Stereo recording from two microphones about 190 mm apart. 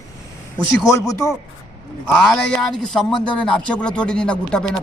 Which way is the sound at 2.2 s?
5° left (ahead or behind).